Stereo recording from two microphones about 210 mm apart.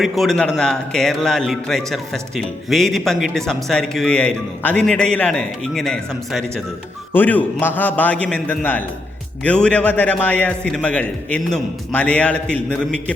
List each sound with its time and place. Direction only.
0.0 s a man's voice: centre (ahead or behind)